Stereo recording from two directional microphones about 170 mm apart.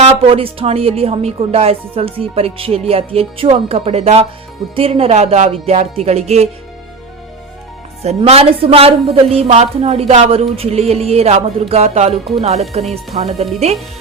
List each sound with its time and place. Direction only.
0.0 s speech: 35° right (ahead or behind)
8.0 s speech: 35° right (ahead or behind)